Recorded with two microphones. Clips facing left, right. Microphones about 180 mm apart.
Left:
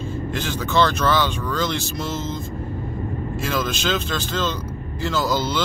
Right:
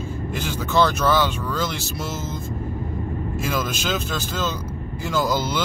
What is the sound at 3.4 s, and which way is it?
Speech, 10° right (ahead or behind).